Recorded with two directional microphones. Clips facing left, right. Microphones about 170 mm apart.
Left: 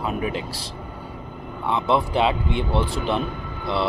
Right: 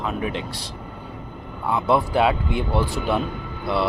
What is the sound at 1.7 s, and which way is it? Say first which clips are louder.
Speech: right 1 dB; 5° right (ahead or behind).